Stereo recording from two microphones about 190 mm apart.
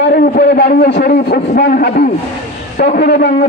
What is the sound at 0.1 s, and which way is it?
A man's voice, 55° left (ahead or behind).